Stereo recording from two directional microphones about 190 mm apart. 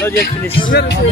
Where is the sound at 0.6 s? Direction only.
55° left (ahead or behind).